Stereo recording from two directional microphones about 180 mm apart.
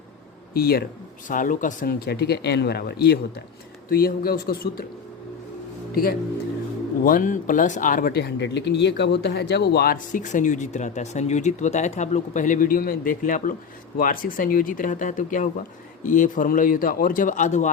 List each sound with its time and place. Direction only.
0.5 s speech: 55° left (ahead or behind)
5.9 s speech: 60° left (ahead or behind)